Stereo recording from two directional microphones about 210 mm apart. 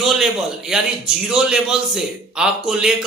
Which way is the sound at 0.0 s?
Centre (ahead or behind).